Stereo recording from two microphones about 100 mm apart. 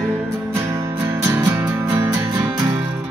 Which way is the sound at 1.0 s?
20° right (ahead or behind).